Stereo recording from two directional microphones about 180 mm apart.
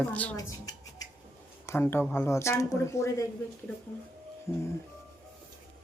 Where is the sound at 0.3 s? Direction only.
20° left (ahead or behind).